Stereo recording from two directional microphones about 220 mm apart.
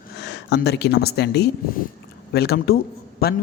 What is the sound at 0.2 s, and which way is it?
Speech, 50° left (ahead or behind).